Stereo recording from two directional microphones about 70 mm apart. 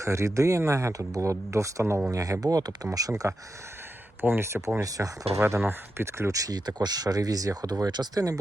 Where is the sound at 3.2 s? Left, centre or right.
Right.